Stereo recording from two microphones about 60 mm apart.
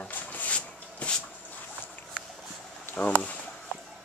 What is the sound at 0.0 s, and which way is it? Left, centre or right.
Rub, left.